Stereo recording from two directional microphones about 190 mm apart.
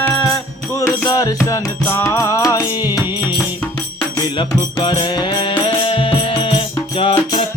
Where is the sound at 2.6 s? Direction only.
10° right (ahead or behind).